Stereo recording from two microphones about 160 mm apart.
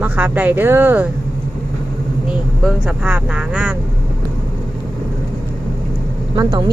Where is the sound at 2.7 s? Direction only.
5° right (ahead or behind).